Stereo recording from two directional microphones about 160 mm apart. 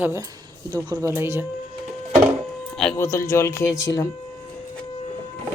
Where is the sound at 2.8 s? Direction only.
5° left (ahead or behind).